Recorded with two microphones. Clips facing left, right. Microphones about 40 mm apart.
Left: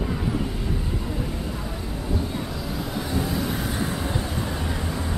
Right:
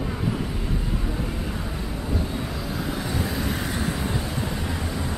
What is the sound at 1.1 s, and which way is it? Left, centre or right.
Vehicle, right.